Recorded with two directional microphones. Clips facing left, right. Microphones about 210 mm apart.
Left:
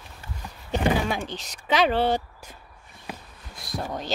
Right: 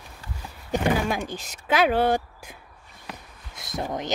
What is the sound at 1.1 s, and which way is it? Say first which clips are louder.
Speech: right 1 dB; 10° right (ahead or behind).